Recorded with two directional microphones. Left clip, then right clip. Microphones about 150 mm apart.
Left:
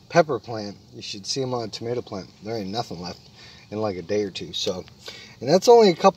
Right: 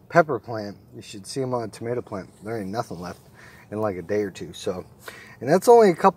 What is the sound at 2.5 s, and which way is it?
Speech, 10° left (ahead or behind).